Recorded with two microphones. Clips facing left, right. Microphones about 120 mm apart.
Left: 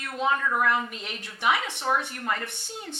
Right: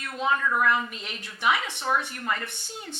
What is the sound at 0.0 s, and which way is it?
A woman's voice, 50° left (ahead or behind).